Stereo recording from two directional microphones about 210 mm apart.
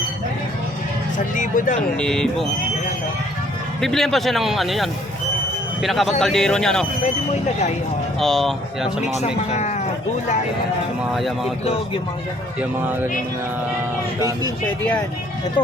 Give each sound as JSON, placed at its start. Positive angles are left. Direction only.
{"t": 1.4, "sound": "speech", "side_deg": 40}
{"t": 2.0, "sound": "a man's voice", "side_deg": 5}
{"t": 3.8, "sound": "a man's voice", "side_deg": 0}
{"t": 8.2, "sound": "a man's voice", "side_deg": 0}
{"t": 9.5, "sound": "speech", "side_deg": 30}
{"t": 11.1, "sound": "a man's voice", "side_deg": 0}
{"t": 14.2, "sound": "speech", "side_deg": -15}